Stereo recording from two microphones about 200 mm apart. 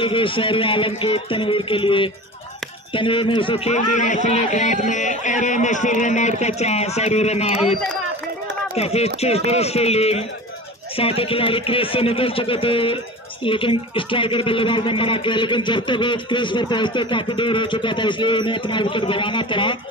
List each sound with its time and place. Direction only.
0.0 s a man's voice: 25° left (ahead or behind)
8.7 s a man's voice: 30° left (ahead or behind)